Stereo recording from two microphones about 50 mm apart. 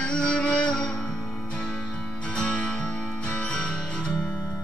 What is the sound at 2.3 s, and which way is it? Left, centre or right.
Music, centre.